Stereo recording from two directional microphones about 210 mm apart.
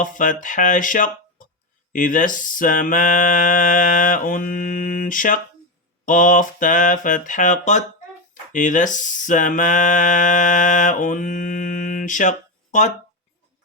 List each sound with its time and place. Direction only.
0.0 s speech: 40° left (ahead or behind)